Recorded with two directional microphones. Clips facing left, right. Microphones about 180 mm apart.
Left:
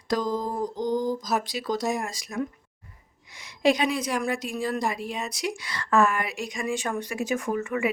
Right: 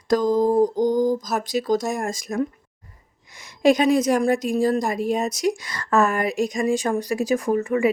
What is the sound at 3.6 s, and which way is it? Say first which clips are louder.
A woman's voice: right 7 dB; 45° right (ahead or behind).